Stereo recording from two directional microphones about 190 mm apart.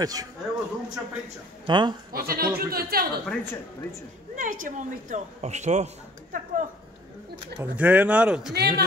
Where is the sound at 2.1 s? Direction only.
50° right (ahead or behind).